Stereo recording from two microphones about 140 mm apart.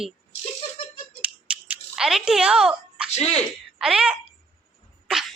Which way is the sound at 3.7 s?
5° right (ahead or behind).